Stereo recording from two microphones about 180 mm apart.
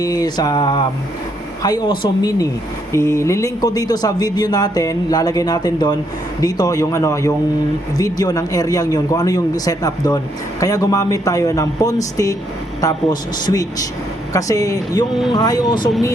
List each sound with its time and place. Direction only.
0.0 s speech: 20° left (ahead or behind)